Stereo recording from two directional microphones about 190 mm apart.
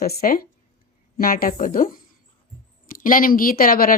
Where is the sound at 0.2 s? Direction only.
50° left (ahead or behind).